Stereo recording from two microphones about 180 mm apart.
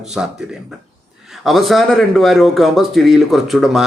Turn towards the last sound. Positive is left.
turn(degrees=0)  # may be behind; listen again after turning